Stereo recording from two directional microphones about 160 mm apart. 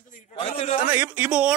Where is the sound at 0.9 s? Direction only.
10° right (ahead or behind).